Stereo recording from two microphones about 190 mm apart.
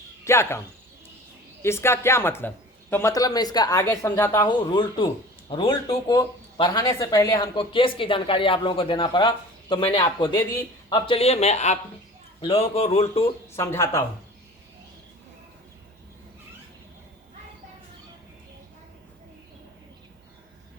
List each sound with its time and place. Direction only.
0.3 s speech: 15° left (ahead or behind)
1.6 s speech: 15° left (ahead or behind)
4.4 s a man's voice: 25° left (ahead or behind)
13.6 s speech: 15° left (ahead or behind)